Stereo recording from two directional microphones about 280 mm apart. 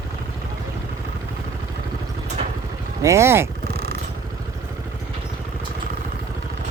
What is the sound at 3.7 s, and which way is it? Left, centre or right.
Vehicle, right.